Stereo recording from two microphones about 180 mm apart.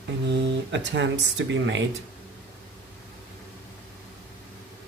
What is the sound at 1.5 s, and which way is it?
Speech, 85° right.